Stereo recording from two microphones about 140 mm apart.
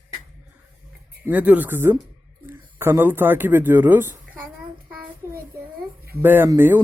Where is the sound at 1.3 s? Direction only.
10° right (ahead or behind).